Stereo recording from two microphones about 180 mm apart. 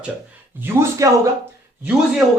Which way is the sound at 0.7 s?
10° right (ahead or behind).